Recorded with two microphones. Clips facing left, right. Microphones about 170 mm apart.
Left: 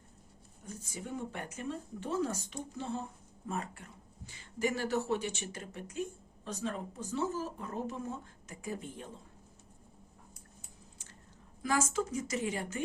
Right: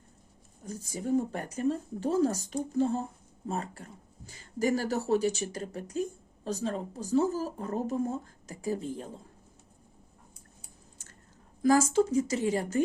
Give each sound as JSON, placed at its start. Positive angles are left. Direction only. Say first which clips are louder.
{"t": 0.6, "sound": "speech", "louder": "right 8 dB", "side_deg": -35}
{"t": 11.6, "sound": "speech", "louder": "right 9 dB", "side_deg": -35}